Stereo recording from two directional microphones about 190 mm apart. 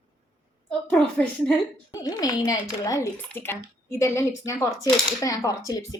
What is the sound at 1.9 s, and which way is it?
A woman's voice, 20° left (ahead or behind).